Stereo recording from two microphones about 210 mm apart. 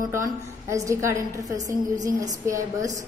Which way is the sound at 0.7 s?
15° right (ahead or behind).